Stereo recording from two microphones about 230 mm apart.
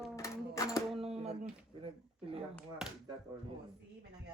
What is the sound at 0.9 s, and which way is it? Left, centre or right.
Speech, right.